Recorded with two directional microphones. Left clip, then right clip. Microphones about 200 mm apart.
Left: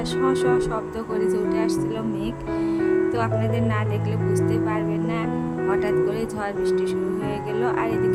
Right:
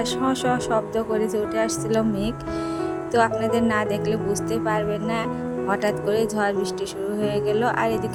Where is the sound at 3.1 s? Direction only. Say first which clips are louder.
Right 4 dB; 20° right (ahead or behind).